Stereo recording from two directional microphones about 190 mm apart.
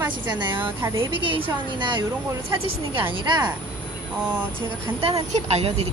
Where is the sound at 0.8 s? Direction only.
15° right (ahead or behind).